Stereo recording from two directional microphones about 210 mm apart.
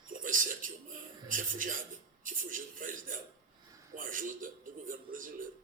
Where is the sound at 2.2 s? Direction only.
40° right (ahead or behind).